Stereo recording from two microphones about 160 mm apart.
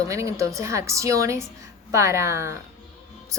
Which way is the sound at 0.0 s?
20° right (ahead or behind).